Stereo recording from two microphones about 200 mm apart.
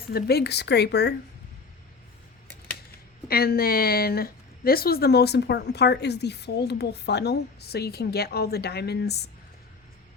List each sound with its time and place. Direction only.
0.1 s a woman's voice: 50° left (ahead or behind)
3.2 s a woman's voice: 50° left (ahead or behind)